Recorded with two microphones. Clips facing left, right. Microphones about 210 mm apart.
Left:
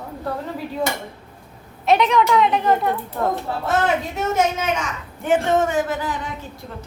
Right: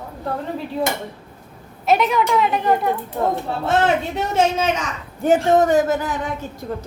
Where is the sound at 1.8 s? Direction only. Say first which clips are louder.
Left 1 dB; centre (ahead or behind).